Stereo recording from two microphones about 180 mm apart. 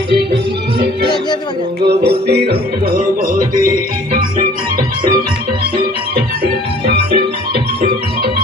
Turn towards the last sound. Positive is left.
turn(degrees=-65)  # may be behind; listen again after turning